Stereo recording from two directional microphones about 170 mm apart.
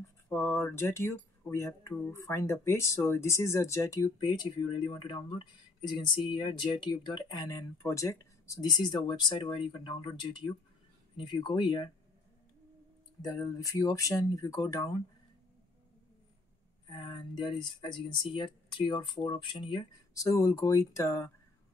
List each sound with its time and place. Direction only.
0.3 s a sound: 15° left (ahead or behind)
1.5 s speech: 15° left (ahead or behind)
13.2 s speech: 20° left (ahead or behind)
16.9 s speech: 25° left (ahead or behind)